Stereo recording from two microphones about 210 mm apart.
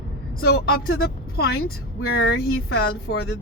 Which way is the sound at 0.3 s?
45° left (ahead or behind).